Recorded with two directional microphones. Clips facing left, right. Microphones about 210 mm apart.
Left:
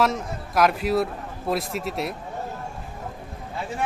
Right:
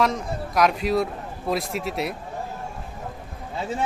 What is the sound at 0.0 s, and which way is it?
A man's voice, centre (ahead or behind).